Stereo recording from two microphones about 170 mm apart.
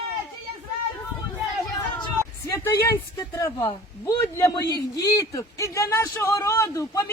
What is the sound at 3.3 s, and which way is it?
A man's voice, 20° left (ahead or behind).